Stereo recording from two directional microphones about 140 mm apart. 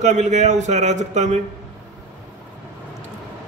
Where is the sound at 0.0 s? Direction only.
55° right (ahead or behind).